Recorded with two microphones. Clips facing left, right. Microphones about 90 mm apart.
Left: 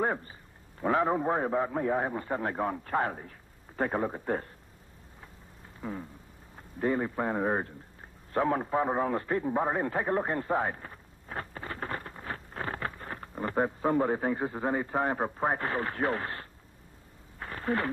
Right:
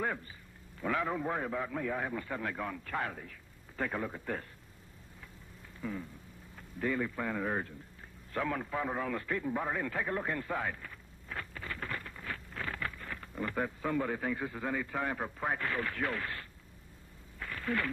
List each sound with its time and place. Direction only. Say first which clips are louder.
0.0 s a man's voice: left 6 dB; 35° left (ahead or behind)
5.8 s vehicle: left 2 dB; 35° left (ahead or behind)
6.5 s a man's voice: left 5 dB; 35° left (ahead or behind)
17.4 s radio: left 4 dB; 35° left (ahead or behind)